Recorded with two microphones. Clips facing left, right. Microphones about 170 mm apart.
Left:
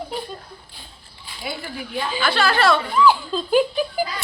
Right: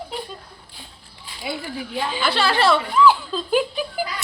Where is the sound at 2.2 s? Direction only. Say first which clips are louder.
Left 1 dB; 30° right (ahead or behind).